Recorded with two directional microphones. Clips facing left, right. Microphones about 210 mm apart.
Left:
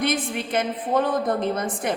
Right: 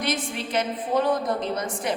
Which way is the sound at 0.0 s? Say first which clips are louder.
Left 3 dB; 55° left (ahead or behind).